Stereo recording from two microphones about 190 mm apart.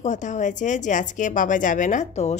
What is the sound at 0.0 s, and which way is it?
A woman's voice, 40° left (ahead or behind).